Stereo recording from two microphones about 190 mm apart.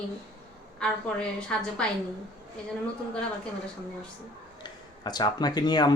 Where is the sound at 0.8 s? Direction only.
5° left (ahead or behind).